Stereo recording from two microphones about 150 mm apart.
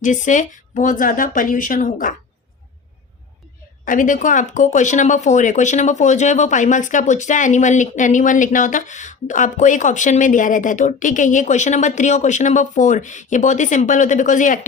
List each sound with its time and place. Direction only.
0.0 s speech: 60° left (ahead or behind)
3.8 s speech: 60° left (ahead or behind)